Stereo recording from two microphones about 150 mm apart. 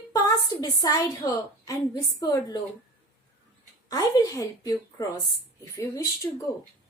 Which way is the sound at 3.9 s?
25° left (ahead or behind).